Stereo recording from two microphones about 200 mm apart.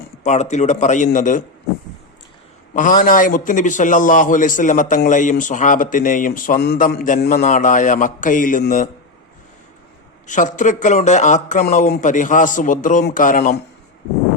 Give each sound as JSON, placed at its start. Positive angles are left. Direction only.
{"t": 0.3, "sound": "a man's voice", "side_deg": 35}
{"t": 2.7, "sound": "a man's voice", "side_deg": 40}
{"t": 10.2, "sound": "a man's voice", "side_deg": 40}